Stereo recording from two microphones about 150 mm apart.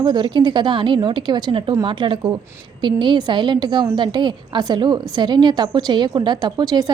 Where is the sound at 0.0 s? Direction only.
30° right (ahead or behind).